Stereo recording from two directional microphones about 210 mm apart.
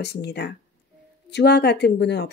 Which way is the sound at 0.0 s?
50° left (ahead or behind).